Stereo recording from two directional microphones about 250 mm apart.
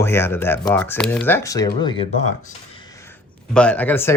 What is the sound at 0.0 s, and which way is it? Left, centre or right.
Speech, centre.